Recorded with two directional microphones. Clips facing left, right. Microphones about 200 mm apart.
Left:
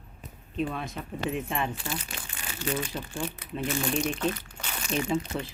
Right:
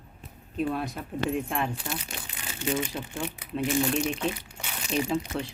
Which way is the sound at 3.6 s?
5° right (ahead or behind).